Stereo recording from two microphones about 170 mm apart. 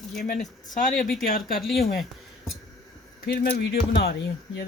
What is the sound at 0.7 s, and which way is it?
Speech, 50° left (ahead or behind).